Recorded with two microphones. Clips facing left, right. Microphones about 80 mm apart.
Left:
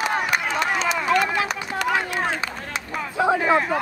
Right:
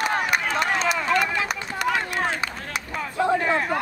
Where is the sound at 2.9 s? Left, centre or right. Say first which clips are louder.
Left 1 dB; centre.